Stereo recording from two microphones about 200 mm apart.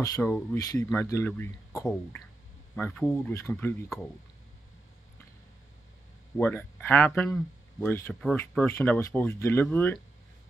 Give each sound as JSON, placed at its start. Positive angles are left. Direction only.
{"t": 0.0, "sound": "speech", "side_deg": 15}
{"t": 6.3, "sound": "speech", "side_deg": 10}